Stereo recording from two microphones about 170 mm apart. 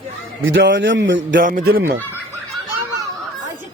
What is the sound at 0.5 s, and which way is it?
Speech, 90° right.